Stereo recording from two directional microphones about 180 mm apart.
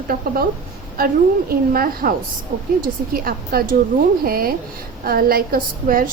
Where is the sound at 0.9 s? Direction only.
55° right (ahead or behind).